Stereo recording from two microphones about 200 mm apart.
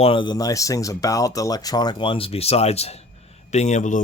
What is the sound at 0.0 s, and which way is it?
Speech, 25° left (ahead or behind).